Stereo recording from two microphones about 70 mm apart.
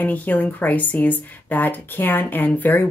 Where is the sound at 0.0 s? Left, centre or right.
Left.